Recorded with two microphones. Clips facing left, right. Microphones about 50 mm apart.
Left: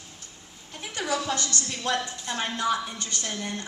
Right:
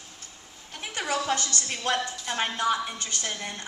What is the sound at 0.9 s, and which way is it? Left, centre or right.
A woman's voice, right.